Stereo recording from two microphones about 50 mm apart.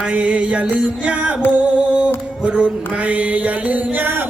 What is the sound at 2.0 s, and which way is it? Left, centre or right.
Mantra, right.